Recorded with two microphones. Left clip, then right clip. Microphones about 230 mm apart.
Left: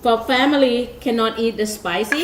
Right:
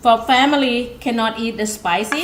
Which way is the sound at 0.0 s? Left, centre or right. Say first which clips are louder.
Right 3 dB; right.